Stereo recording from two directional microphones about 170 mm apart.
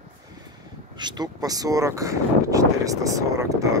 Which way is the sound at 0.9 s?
25° right (ahead or behind).